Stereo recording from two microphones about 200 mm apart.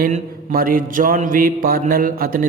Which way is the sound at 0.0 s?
45° right (ahead or behind).